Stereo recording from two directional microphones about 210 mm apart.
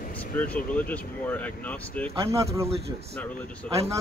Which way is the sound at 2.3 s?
15° right (ahead or behind).